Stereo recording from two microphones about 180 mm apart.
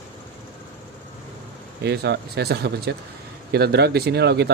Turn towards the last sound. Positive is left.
turn(degrees=-65)  # may be behind; listen again after turning